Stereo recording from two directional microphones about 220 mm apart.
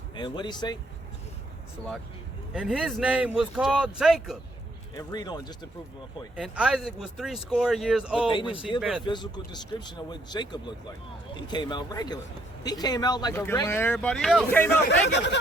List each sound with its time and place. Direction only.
0.2 s speech: 20° left (ahead or behind)
2.5 s speech: 5° right (ahead or behind)
4.9 s speech: 15° left (ahead or behind)
6.3 s speech: 5° right (ahead or behind)
8.5 s speech: 25° left (ahead or behind)
8.8 s speech: centre (ahead or behind)
9.0 s speech: 20° left (ahead or behind)
15.1 s speech: 55° left (ahead or behind)